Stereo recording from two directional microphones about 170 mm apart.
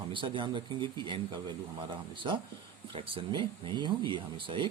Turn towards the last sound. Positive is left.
turn(degrees=-30)  # may be behind; listen again after turning